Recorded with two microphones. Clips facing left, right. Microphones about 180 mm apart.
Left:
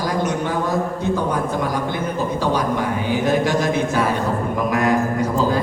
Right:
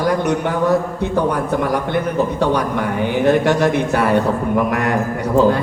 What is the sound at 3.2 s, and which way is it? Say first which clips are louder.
A man's voice: right 6 dB; 65° right (ahead or behind).